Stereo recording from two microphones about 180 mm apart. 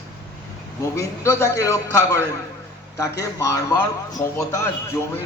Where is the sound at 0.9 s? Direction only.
15° left (ahead or behind).